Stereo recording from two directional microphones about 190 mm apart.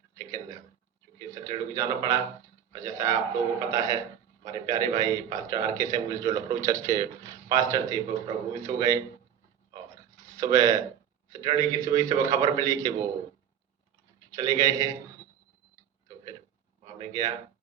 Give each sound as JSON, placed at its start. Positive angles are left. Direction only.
{"t": 0.2, "sound": "a sound", "side_deg": -15}
{"t": 1.3, "sound": "a man's voice", "side_deg": -15}
{"t": 10.2, "sound": "a man's voice", "side_deg": -15}
{"t": 14.3, "sound": "a man's voice", "side_deg": -15}
{"t": 16.8, "sound": "speech", "side_deg": -15}